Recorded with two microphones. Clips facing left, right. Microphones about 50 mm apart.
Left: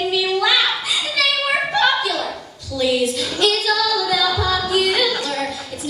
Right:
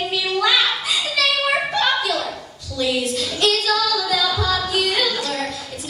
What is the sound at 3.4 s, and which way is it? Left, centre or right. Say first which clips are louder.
Child singing: left 1 dB; centre.